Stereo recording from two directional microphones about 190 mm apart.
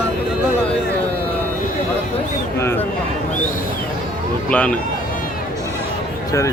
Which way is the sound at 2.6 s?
10° left (ahead or behind).